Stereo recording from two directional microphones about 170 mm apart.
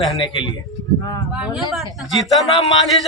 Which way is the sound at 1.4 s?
Centre (ahead or behind).